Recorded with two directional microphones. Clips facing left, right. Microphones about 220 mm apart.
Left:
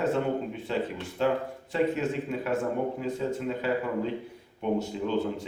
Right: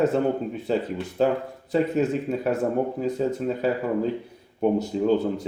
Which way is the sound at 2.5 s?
40° right (ahead or behind).